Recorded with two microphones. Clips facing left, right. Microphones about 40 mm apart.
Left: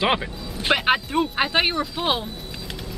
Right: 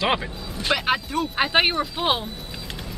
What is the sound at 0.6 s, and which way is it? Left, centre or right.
Speech, left.